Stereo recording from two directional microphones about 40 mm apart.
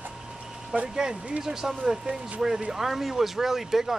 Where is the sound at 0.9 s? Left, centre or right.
Centre.